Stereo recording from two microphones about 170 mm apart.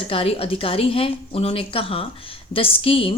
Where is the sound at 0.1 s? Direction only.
35° left (ahead or behind).